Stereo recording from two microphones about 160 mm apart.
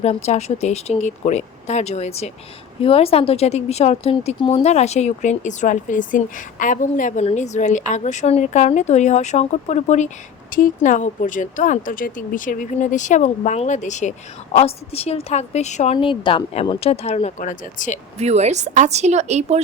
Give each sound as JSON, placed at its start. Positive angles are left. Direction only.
{"t": 0.0, "sound": "a woman's voice", "side_deg": 40}
{"t": 10.5, "sound": "a woman's voice", "side_deg": 55}
{"t": 18.2, "sound": "speech", "side_deg": -45}